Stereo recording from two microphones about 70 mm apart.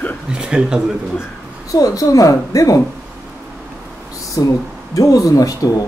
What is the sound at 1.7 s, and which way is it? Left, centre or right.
Speech, left.